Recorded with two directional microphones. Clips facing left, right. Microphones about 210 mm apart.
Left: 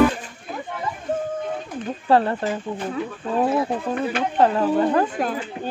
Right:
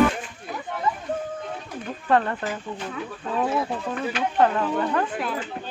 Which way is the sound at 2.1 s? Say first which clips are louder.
Left 4 dB; 30° left (ahead or behind).